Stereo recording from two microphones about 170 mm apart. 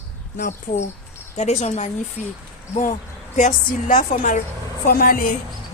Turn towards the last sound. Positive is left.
turn(degrees=55)  # may be behind; listen again after turning